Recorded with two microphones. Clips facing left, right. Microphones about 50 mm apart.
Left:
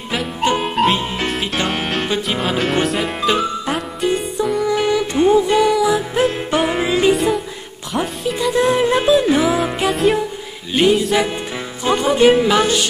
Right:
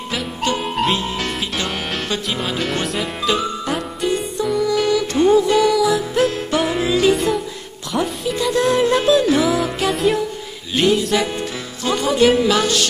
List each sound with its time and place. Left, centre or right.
0.1 s music: centre
1.7 s music: centre
4.4 s music: centre
7.1 s music: centre
8.5 s music: centre
9.8 s music: centre
10.8 s mantra: centre
11.8 s speech: left